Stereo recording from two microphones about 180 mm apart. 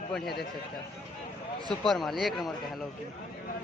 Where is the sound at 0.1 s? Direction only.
Centre (ahead or behind).